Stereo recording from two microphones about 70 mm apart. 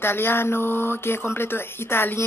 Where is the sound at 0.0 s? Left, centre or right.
Left.